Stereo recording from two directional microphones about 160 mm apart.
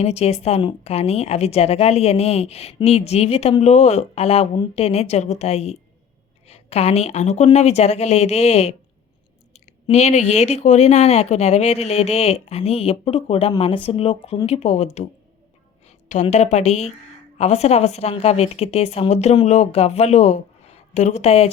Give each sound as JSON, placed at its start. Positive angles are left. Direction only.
{"t": 0.0, "sound": "speech", "side_deg": 40}
{"t": 16.3, "sound": "speech", "side_deg": 45}